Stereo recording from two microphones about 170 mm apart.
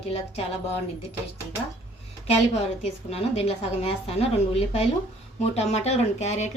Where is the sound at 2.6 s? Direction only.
40° left (ahead or behind).